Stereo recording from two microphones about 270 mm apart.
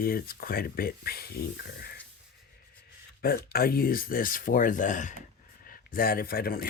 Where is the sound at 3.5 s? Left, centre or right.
Left.